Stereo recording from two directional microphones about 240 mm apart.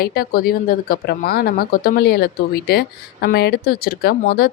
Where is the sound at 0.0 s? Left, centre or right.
Left.